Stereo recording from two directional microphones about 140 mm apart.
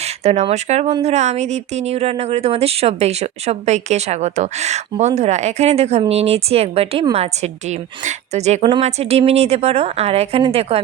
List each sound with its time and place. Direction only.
0.0 s speech: 50° right (ahead or behind)